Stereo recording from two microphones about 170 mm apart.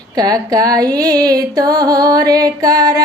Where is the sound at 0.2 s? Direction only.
20° right (ahead or behind).